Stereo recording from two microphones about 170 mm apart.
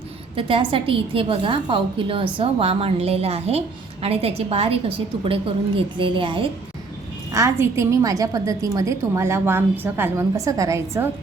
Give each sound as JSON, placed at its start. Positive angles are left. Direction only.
{"t": 0.3, "sound": "a woman's voice", "side_deg": -30}
{"t": 7.3, "sound": "a woman's voice", "side_deg": -15}